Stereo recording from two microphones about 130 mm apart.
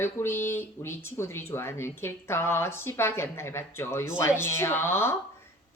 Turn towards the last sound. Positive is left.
turn(degrees=20)  # may be behind; listen again after turning